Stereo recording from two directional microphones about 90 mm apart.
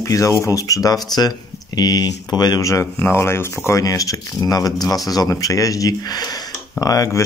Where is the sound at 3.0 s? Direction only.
30° left (ahead or behind).